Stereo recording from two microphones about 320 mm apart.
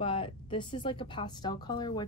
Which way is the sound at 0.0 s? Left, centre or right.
Centre.